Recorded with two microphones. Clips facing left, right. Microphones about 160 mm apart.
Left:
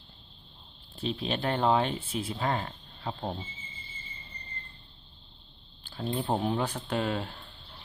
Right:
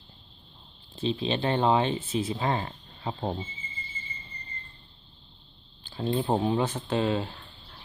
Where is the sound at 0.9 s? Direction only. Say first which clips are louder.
Right 4 dB; 20° right (ahead or behind).